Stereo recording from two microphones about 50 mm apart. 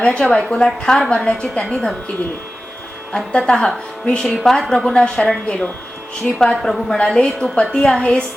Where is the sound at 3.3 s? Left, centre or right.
Centre.